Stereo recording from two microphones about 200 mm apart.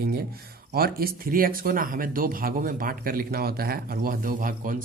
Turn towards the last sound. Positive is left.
turn(degrees=-45)  # may be behind; listen again after turning